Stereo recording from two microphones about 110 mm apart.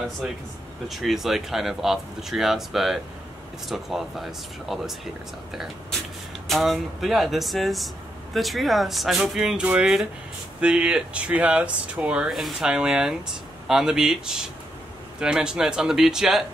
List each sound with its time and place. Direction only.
0.8 s speech: centre (ahead or behind)